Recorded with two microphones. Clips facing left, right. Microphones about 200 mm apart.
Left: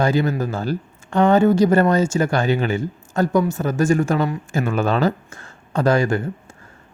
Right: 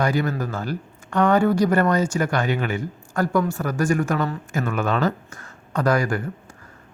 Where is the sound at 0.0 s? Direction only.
25° left (ahead or behind).